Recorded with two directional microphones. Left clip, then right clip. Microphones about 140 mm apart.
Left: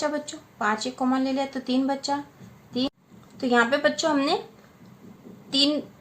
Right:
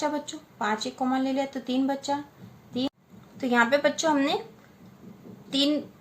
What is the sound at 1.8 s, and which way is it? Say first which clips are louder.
Speech: left 2 dB; 25° left (ahead or behind).